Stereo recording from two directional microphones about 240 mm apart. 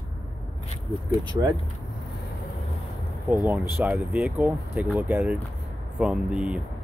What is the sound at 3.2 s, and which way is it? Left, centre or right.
Speech, centre.